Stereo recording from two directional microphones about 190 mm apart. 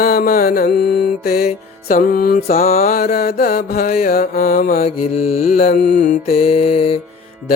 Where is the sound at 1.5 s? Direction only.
45° left (ahead or behind).